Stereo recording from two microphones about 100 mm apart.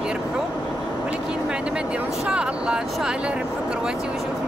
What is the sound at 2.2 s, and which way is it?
Speech, 10° right (ahead or behind).